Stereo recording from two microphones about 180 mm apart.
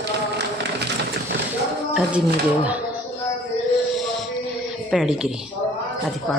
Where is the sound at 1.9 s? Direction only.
5° right (ahead or behind).